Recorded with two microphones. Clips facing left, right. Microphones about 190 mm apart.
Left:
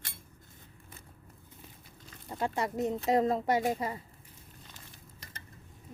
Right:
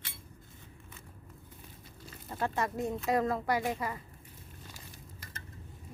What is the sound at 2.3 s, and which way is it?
A woman's voice, 15° left (ahead or behind).